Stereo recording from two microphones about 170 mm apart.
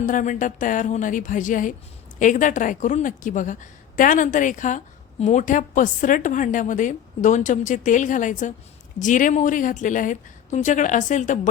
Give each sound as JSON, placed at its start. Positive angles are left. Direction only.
{"t": 0.0, "sound": "a woman's voice", "side_deg": 50}